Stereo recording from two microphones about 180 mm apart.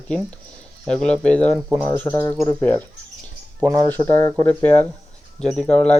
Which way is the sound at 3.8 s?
10° left (ahead or behind).